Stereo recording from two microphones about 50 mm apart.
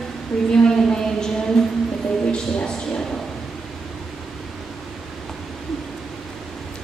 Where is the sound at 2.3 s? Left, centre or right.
Centre.